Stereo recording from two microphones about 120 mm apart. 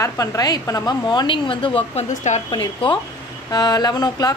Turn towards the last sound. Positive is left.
turn(degrees=35)  # may be behind; listen again after turning